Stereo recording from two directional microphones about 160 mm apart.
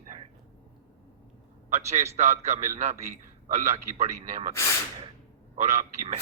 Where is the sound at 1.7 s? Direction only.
45° right (ahead or behind).